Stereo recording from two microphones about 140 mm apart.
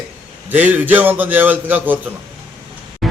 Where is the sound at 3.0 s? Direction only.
Centre (ahead or behind).